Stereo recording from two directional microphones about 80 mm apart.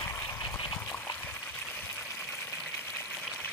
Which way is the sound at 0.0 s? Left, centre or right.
Left.